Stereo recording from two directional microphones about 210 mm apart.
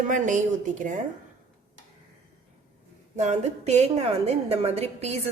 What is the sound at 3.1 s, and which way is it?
A woman's voice, 35° right (ahead or behind).